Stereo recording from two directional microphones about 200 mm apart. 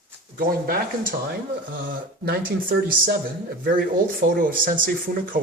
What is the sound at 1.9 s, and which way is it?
Speech, 45° right (ahead or behind).